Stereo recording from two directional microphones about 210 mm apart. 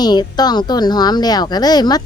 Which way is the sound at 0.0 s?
20° left (ahead or behind).